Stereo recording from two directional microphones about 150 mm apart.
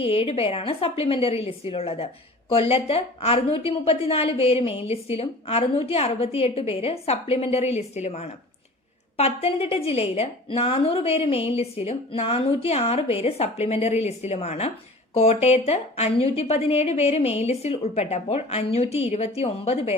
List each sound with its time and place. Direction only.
0.0 s a woman's voice: 40° left (ahead or behind)